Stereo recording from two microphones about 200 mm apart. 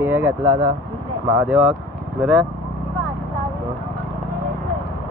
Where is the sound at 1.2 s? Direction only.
5° right (ahead or behind).